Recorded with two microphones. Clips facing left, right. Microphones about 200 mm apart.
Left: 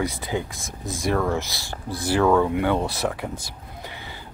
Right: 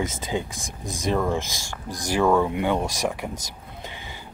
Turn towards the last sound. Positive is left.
turn(degrees=-15)  # may be behind; listen again after turning